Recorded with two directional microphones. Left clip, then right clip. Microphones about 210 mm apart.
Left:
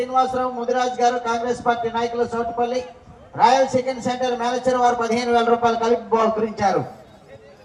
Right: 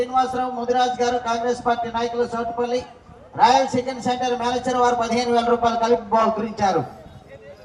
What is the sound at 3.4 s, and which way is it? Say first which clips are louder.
A man's voice: even; 5° left (ahead or behind).